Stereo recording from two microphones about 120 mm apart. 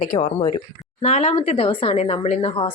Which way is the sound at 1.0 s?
65° left (ahead or behind).